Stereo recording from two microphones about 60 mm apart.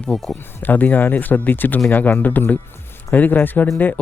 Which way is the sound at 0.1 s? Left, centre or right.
Centre.